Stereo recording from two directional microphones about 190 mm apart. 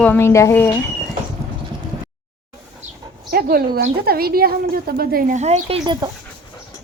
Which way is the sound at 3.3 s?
50° right (ahead or behind).